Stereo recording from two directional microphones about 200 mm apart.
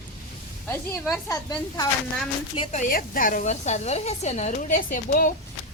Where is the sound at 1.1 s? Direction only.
20° left (ahead or behind).